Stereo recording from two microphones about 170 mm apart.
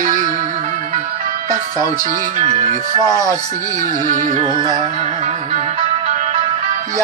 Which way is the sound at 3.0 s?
20° left (ahead or behind).